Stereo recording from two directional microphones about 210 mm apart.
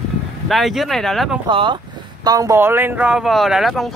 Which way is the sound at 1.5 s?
25° right (ahead or behind).